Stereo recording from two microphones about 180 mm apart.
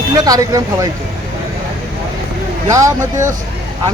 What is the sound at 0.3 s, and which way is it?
Speech, 20° right (ahead or behind).